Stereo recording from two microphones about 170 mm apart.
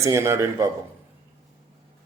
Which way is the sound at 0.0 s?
15° right (ahead or behind).